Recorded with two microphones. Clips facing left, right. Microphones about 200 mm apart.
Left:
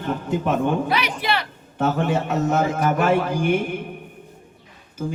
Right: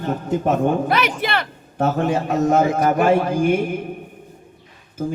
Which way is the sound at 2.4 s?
40° right (ahead or behind).